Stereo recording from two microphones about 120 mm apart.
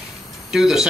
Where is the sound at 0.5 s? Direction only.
5° right (ahead or behind).